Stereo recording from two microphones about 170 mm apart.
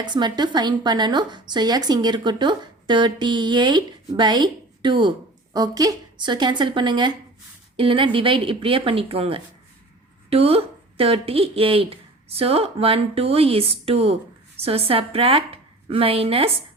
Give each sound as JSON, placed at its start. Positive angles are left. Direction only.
{"t": 0.0, "sound": "a woman's voice", "side_deg": -25}